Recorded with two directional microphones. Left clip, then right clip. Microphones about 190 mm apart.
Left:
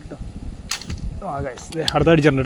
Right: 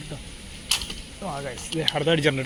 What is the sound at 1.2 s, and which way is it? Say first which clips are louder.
Speech: left 5 dB; 35° left (ahead or behind).